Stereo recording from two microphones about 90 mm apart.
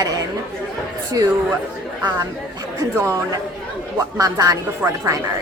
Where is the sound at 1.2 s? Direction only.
35° right (ahead or behind).